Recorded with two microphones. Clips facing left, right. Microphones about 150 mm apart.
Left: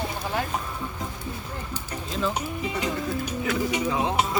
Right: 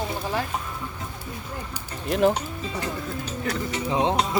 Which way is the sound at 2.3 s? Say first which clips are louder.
Left 2 dB; 15° left (ahead or behind).